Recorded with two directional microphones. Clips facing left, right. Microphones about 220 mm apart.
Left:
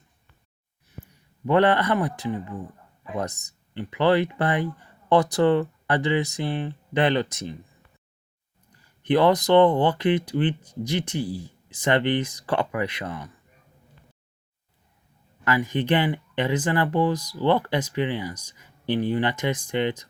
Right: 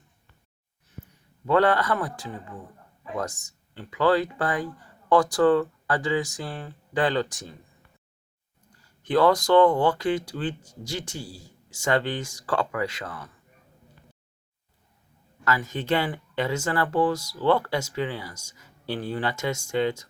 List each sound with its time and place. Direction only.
1.5 s speech: 20° left (ahead or behind)
3.8 s speech: 20° left (ahead or behind)
9.0 s speech: 20° left (ahead or behind)
15.4 s speech: 15° left (ahead or behind)